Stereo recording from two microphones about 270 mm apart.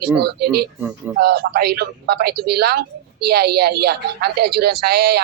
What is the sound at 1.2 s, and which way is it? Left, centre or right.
A woman's voice, right.